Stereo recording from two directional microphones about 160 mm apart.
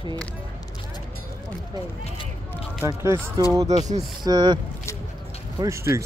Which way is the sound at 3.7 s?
45° right (ahead or behind).